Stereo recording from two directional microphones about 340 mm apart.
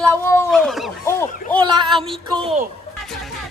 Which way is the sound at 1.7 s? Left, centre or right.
Centre.